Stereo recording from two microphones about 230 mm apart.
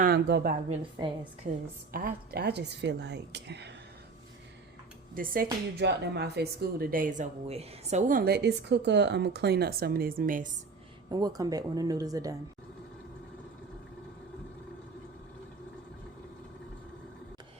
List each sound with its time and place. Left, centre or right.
0.0 s a woman's voice: right
5.1 s speech: right
11.1 s speech: centre